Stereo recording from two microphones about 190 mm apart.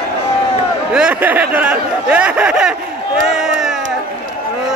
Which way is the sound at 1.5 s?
5° right (ahead or behind).